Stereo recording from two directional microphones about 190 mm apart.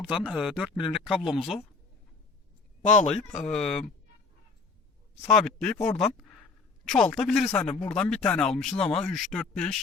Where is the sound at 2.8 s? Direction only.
40° left (ahead or behind).